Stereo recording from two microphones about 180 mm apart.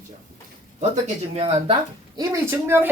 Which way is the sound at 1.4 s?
35° right (ahead or behind).